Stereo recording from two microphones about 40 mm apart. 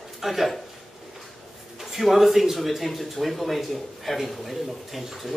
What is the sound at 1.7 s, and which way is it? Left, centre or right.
Speech, centre.